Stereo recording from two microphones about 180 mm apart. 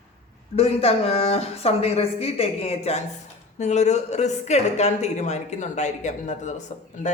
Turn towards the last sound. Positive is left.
turn(degrees=40)  # may be behind; listen again after turning